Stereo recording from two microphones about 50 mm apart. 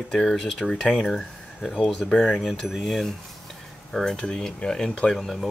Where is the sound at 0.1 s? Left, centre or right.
Centre.